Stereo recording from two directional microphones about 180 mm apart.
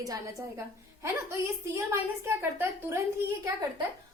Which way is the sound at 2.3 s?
10° right (ahead or behind).